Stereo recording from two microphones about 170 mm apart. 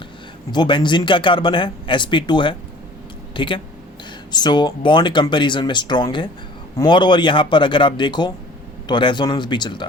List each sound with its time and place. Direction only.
0.5 s speech: 25° left (ahead or behind)